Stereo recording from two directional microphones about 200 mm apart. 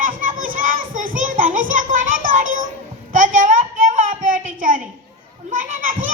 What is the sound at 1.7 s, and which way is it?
Music, 40° right (ahead or behind).